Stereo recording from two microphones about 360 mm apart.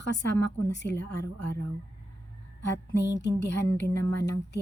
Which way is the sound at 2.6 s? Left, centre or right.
Left.